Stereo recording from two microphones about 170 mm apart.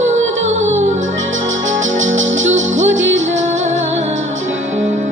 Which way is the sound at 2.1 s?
90° right.